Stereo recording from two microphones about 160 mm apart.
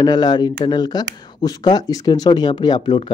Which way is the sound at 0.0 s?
25° left (ahead or behind).